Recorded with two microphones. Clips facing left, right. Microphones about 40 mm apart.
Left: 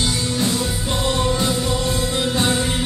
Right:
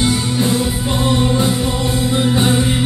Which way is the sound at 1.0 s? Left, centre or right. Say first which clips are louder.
Right 4 dB; right.